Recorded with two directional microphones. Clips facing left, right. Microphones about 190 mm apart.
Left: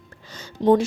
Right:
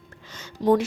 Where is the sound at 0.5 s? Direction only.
25° left (ahead or behind).